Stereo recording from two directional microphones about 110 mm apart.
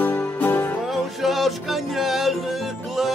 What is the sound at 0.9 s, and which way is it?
Music, centre (ahead or behind).